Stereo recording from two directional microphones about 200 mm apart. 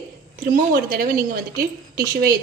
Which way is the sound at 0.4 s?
45° right (ahead or behind).